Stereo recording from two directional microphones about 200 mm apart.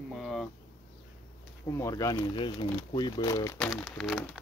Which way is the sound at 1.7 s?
15° left (ahead or behind).